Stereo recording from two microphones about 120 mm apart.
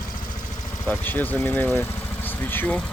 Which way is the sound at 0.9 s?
15° left (ahead or behind).